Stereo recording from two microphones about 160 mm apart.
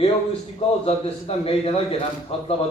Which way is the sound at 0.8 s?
35° left (ahead or behind).